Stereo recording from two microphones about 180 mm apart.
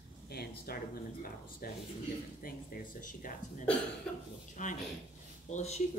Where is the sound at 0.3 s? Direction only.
60° left (ahead or behind).